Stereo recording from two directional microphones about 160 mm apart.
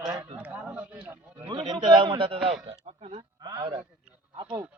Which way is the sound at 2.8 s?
40° right (ahead or behind).